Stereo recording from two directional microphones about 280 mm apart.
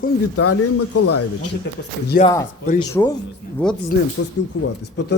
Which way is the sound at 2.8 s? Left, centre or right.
Centre.